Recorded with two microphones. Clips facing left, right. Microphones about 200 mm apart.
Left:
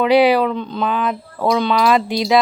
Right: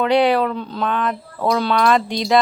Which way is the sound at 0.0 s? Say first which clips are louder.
Left 3 dB; 5° left (ahead or behind).